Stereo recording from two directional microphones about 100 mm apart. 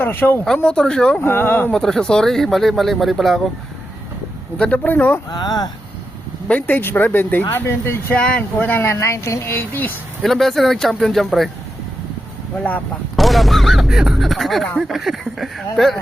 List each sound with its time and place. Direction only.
0.0 s speech: 20° left (ahead or behind)
0.4 s speech: 10° left (ahead or behind)
1.2 s speech: 20° left (ahead or behind)
1.7 s speech: 5° left (ahead or behind)
4.5 s speech: 10° left (ahead or behind)
5.3 s speech: 40° left (ahead or behind)
6.5 s speech: 15° left (ahead or behind)
8.2 s speech: 10° left (ahead or behind)
10.2 s speech: centre (ahead or behind)
12.5 s speech: 15° left (ahead or behind)
13.1 s speech: centre (ahead or behind)